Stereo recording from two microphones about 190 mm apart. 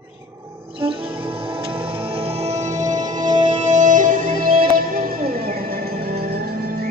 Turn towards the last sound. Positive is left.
turn(degrees=-50)  # may be behind; listen again after turning